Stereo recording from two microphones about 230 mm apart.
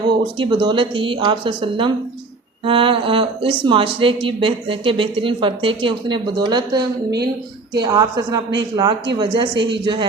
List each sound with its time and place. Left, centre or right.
0.3 s speech: right